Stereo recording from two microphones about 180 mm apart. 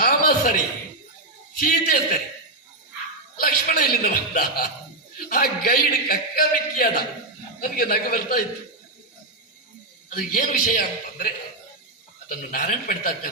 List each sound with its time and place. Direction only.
0.0 s a sound: 50° left (ahead or behind)
1.5 s a man's voice: 55° left (ahead or behind)
3.4 s a man's voice: 50° left (ahead or behind)
10.1 s a man's voice: 50° left (ahead or behind)
12.3 s a man's voice: 50° left (ahead or behind)